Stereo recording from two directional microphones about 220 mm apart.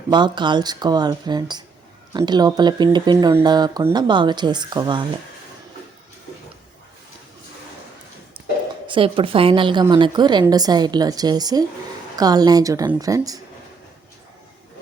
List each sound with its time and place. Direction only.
0.1 s speech: 20° right (ahead or behind)
8.9 s a woman's voice: 25° right (ahead or behind)